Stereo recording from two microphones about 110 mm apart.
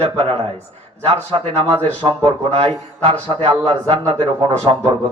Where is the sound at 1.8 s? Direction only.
15° left (ahead or behind).